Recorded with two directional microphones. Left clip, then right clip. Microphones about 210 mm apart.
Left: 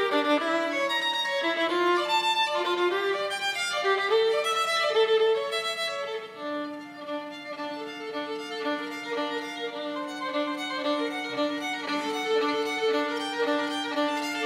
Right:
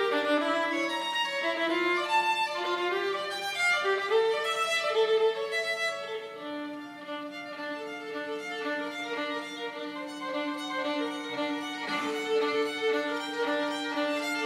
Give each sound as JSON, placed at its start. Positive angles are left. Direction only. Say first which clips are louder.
{"t": 0.0, "sound": "violin", "louder": "left 2 dB", "side_deg": 20}
{"t": 8.6, "sound": "music", "louder": "left 3 dB", "side_deg": 20}
{"t": 10.3, "sound": "music", "louder": "left 2 dB", "side_deg": 25}